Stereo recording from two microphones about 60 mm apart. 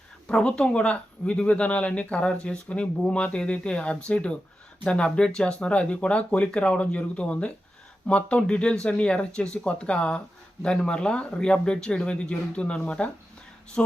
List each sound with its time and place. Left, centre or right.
0.3 s speech: centre